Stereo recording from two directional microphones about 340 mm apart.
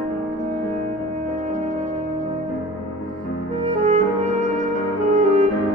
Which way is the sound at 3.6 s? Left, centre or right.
Centre.